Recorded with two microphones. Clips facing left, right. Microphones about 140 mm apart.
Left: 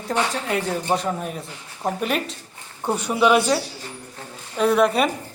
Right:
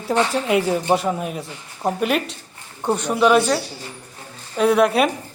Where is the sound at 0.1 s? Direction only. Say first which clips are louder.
Right 5 dB; 15° right (ahead or behind).